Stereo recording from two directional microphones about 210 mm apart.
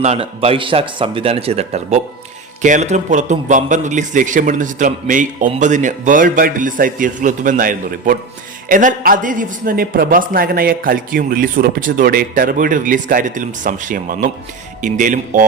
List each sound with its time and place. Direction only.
0.0 s a man's voice: 30° right (ahead or behind)